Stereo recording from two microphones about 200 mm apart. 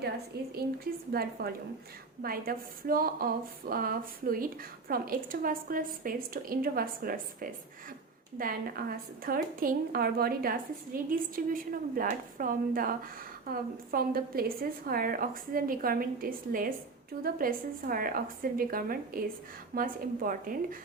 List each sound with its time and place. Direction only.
0.3 s a woman's voice: 50° right (ahead or behind)
8.4 s a woman's voice: 45° right (ahead or behind)